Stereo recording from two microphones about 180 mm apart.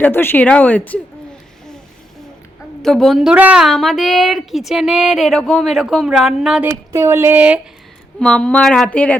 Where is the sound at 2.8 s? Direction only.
Centre (ahead or behind).